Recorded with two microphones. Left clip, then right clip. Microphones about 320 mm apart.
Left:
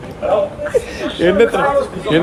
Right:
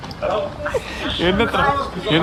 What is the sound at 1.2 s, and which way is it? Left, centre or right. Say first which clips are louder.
Speech: left 6 dB; centre.